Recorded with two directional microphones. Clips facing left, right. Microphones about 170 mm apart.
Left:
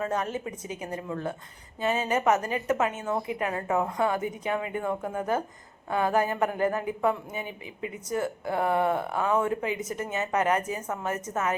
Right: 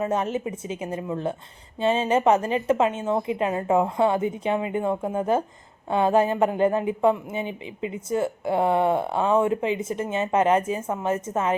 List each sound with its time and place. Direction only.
0.0 s a woman's voice: 25° right (ahead or behind)